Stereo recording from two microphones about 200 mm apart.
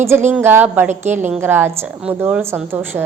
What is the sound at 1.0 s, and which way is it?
Speech, 35° right (ahead or behind).